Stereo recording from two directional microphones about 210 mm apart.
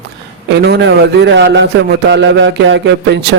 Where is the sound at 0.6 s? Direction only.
60° right (ahead or behind).